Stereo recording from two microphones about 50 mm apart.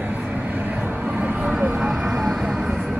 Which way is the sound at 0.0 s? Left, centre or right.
Right.